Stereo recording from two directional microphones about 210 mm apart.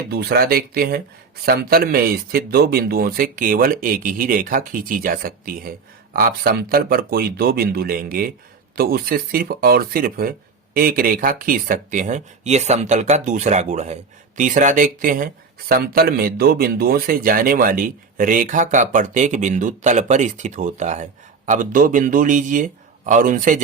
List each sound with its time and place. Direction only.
0.1 s speech: 50° right (ahead or behind)